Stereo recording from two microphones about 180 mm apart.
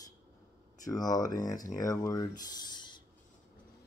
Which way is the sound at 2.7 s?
25° left (ahead or behind).